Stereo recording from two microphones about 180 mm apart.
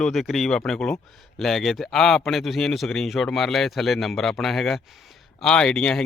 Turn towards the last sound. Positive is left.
turn(degrees=5)  # may be behind; listen again after turning